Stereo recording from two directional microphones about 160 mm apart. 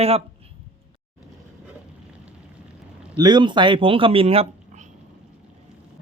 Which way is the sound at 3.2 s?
25° right (ahead or behind).